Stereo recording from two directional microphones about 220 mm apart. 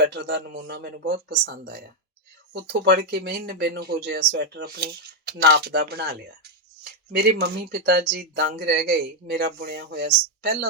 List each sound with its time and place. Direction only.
0.1 s speech: 50° right (ahead or behind)